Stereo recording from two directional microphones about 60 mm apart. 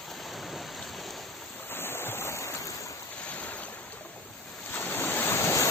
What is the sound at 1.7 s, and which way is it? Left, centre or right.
Waves, left.